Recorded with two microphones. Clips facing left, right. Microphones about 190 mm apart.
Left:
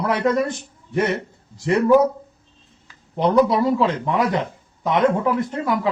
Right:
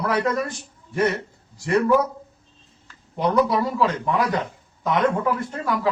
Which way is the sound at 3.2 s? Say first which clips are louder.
Left 3 dB; 25° left (ahead or behind).